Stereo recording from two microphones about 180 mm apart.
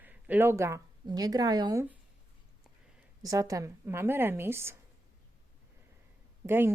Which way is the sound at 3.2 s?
20° right (ahead or behind).